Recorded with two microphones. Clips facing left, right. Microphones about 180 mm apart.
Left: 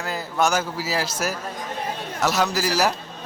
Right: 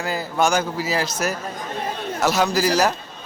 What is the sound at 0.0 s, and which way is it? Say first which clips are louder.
A man's voice: right 2 dB; centre (ahead or behind).